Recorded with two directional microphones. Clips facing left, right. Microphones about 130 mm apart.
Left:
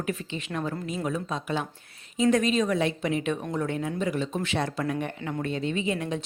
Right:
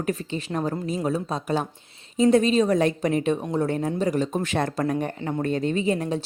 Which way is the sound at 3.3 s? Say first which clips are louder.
Right 4 dB; 30° right (ahead or behind).